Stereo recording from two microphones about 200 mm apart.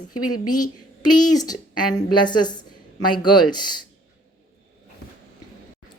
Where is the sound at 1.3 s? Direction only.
20° left (ahead or behind).